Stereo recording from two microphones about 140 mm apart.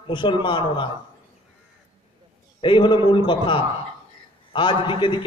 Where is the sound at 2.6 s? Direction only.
35° left (ahead or behind).